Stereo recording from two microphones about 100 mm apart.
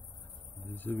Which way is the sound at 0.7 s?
20° left (ahead or behind).